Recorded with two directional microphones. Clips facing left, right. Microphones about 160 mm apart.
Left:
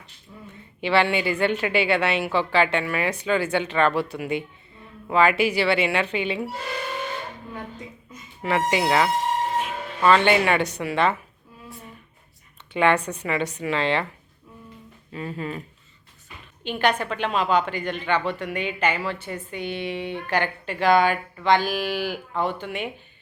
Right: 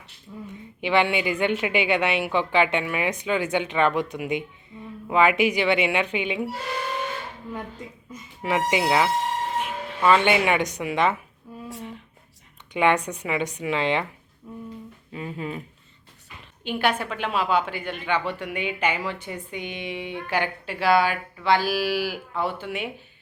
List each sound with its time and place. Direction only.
0.8 s a woman's voice: 15° right (ahead or behind)
8.4 s a woman's voice: 15° right (ahead or behind)
12.7 s a woman's voice: 15° right (ahead or behind)
15.1 s a woman's voice: 10° right (ahead or behind)
16.6 s a woman's voice: 5° right (ahead or behind)